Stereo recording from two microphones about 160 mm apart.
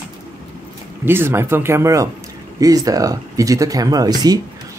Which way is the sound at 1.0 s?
15° right (ahead or behind).